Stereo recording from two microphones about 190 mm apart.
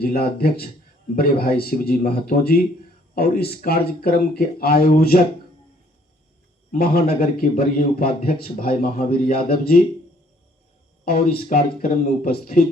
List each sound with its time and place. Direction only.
0.0 s speech: 50° left (ahead or behind)
6.7 s speech: 50° left (ahead or behind)
11.0 s speech: 50° left (ahead or behind)